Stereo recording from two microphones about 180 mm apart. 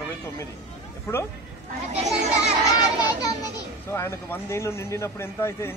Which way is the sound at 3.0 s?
20° left (ahead or behind).